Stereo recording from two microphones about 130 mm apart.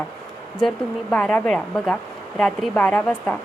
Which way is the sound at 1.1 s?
10° left (ahead or behind).